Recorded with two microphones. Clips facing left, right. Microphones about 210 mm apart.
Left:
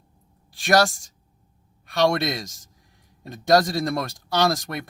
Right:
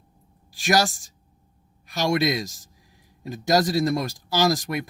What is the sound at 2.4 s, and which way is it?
Speech, 45° left (ahead or behind).